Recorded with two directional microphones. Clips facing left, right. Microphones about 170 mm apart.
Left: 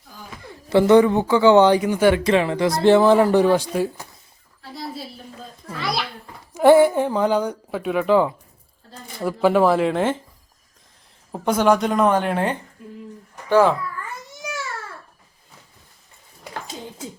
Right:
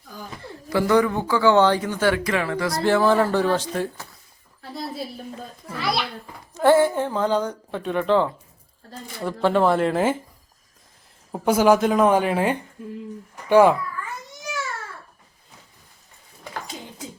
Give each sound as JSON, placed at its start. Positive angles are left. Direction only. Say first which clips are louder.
{"t": 0.4, "sound": "speech", "louder": "left 6 dB", "side_deg": 25}
{"t": 5.6, "sound": "a woman's voice", "louder": "right 1 dB", "side_deg": 0}
{"t": 6.5, "sound": "a woman's voice", "louder": "left 4 dB", "side_deg": 15}
{"t": 11.3, "sound": "a woman's voice", "louder": "right 1 dB", "side_deg": -5}
{"t": 13.5, "sound": "a child's voice", "louder": "right 1 dB", "side_deg": -15}